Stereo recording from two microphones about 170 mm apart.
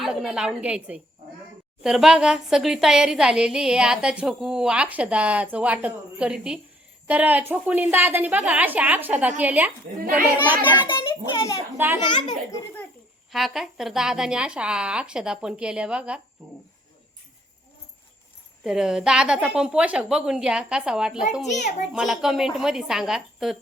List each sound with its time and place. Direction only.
0.0 s a woman's voice: 5° right (ahead or behind)
11.3 s a woman's voice: 15° left (ahead or behind)
13.3 s a woman's voice: centre (ahead or behind)
18.6 s a woman's voice: 5° right (ahead or behind)
21.5 s a child's voice: 45° left (ahead or behind)
21.9 s a woman's voice: centre (ahead or behind)